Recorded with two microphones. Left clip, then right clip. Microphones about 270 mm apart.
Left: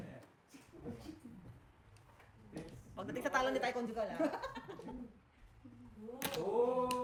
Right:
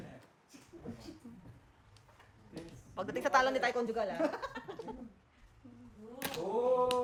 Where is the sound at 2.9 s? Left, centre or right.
Right.